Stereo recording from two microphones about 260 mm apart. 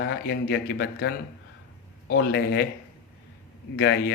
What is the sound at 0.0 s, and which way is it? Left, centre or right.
Speech, left.